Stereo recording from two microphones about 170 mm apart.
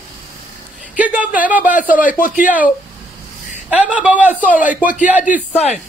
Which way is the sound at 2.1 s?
50° left (ahead or behind).